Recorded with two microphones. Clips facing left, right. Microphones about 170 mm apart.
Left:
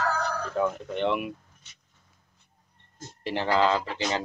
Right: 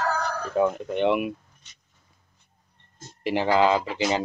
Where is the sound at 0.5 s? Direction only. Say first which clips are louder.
Right 5 dB; 15° right (ahead or behind).